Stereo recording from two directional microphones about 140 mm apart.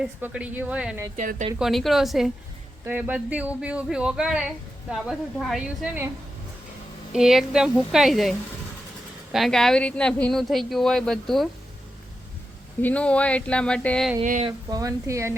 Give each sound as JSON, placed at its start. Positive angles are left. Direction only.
{"t": 0.0, "sound": "speech", "side_deg": -10}
{"t": 1.1, "sound": "speech", "side_deg": -70}
{"t": 1.5, "sound": "speech", "side_deg": 0}
{"t": 2.8, "sound": "speech", "side_deg": -10}
{"t": 7.1, "sound": "speech", "side_deg": -5}
{"t": 12.8, "sound": "speech", "side_deg": 10}
{"t": 14.7, "sound": "speech", "side_deg": -25}